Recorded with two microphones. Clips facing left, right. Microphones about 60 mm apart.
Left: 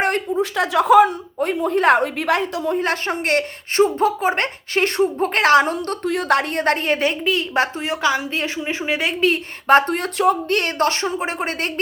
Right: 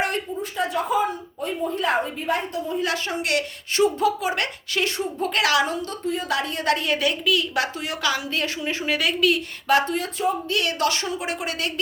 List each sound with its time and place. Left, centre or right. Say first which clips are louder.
0.3 s a woman's voice: left 8 dB; left
2.7 s a woman's voice: left 1 dB; left
5.7 s a woman's voice: left 4 dB; left
10.2 s speech: left 8 dB; left
10.6 s a woman's voice: left 4 dB; left